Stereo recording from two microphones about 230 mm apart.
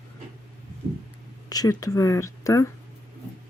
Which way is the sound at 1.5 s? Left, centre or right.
Centre.